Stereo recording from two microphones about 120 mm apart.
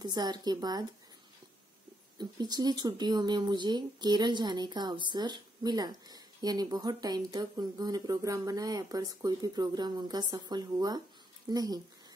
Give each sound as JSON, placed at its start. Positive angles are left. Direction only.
{"t": 0.0, "sound": "speech", "side_deg": -35}
{"t": 2.1, "sound": "speech", "side_deg": -35}